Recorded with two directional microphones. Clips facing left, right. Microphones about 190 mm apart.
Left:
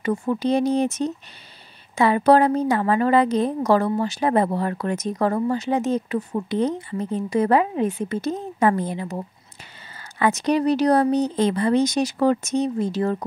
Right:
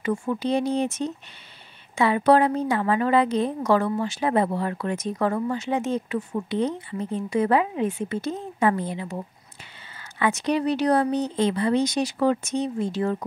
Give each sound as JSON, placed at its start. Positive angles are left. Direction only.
{"t": 0.0, "sound": "a woman's voice", "side_deg": 40}